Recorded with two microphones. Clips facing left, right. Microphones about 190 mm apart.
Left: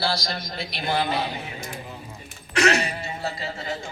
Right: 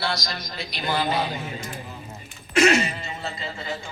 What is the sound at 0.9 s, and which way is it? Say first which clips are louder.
Speech: right 1 dB; 60° left (ahead or behind).